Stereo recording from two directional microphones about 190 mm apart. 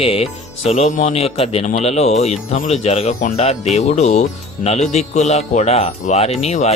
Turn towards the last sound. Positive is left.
turn(degrees=35)  # may be behind; listen again after turning